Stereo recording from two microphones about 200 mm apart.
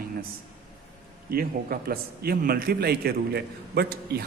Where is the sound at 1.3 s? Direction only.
50° right (ahead or behind).